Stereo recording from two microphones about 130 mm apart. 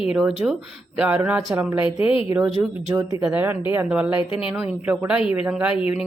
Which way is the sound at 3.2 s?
10° right (ahead or behind).